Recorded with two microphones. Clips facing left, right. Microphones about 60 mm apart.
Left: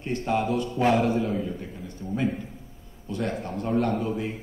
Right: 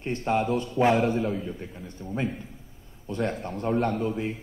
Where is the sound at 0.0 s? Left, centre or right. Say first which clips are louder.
Even; right.